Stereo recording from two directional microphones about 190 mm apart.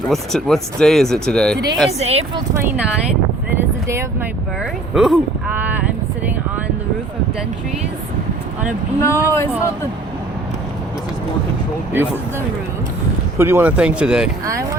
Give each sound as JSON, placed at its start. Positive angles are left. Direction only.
{"t": 0.1, "sound": "speech", "side_deg": 0}
{"t": 1.9, "sound": "speech", "side_deg": -35}
{"t": 4.9, "sound": "a sound", "side_deg": 0}
{"t": 9.0, "sound": "speech", "side_deg": 15}
{"t": 11.9, "sound": "speech", "side_deg": -10}
{"t": 13.4, "sound": "speech", "side_deg": -10}
{"t": 14.4, "sound": "speech", "side_deg": -15}